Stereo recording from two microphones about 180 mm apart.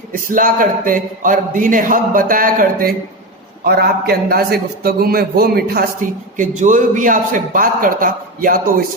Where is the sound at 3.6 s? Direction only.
60° right (ahead or behind).